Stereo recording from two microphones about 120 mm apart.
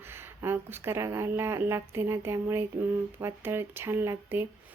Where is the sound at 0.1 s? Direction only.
20° right (ahead or behind).